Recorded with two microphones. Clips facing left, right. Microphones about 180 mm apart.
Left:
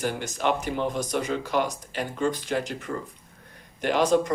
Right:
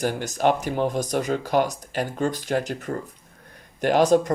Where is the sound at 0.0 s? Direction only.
40° right (ahead or behind).